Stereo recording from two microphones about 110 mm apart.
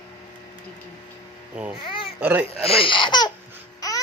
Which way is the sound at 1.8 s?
55° left (ahead or behind).